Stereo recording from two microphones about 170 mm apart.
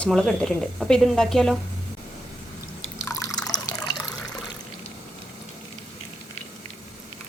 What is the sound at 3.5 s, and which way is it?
Water, 20° left (ahead or behind).